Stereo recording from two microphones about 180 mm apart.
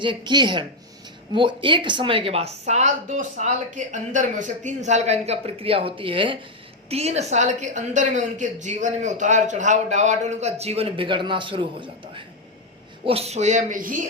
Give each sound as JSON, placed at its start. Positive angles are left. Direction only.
{"t": 0.0, "sound": "a woman's voice", "side_deg": -25}